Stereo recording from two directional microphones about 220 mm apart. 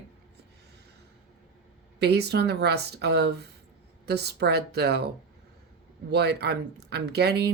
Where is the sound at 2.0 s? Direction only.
50° right (ahead or behind).